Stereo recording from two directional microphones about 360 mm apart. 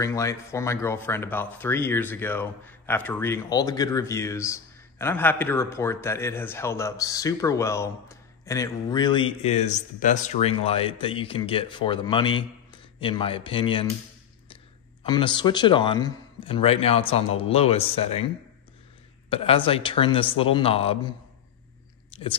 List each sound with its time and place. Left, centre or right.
0.0 s speech: centre
15.0 s speech: centre
19.3 s speech: centre